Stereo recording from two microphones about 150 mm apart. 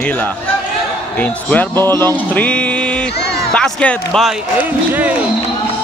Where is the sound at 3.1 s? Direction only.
90° left.